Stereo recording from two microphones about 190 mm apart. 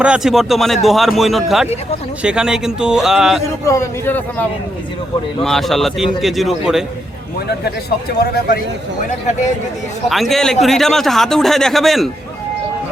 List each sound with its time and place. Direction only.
0.0 s a man's voice: 5° right (ahead or behind)
3.7 s a man's voice: 15° left (ahead or behind)
7.3 s speech: 55° left (ahead or behind)
10.1 s a man's voice: centre (ahead or behind)